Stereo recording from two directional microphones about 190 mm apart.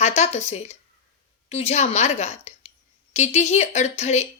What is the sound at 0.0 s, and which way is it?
A woman's voice, 35° left (ahead or behind).